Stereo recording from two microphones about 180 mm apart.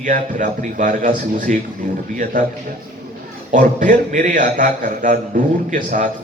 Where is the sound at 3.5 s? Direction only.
45° right (ahead or behind).